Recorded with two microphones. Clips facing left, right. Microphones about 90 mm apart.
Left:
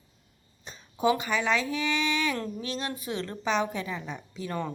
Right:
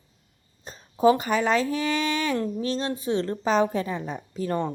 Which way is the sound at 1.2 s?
45° right (ahead or behind).